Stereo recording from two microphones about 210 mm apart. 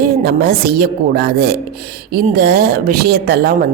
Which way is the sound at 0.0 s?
50° right (ahead or behind).